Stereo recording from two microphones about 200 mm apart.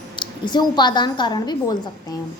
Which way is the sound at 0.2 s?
20° left (ahead or behind).